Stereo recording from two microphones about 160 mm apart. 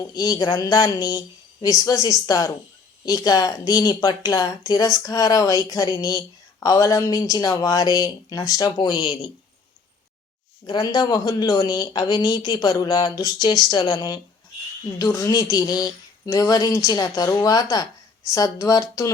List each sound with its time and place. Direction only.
0.1 s speech: 25° left (ahead or behind)
10.7 s speech: 25° left (ahead or behind)